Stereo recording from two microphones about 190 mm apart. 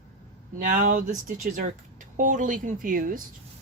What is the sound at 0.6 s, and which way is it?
Speech, 45° right (ahead or behind).